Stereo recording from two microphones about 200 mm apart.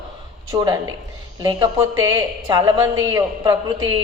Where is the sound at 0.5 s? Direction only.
20° right (ahead or behind).